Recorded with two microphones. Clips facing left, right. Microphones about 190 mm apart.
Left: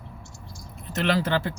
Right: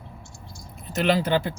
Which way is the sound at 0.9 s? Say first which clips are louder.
Right 2 dB; 15° right (ahead or behind).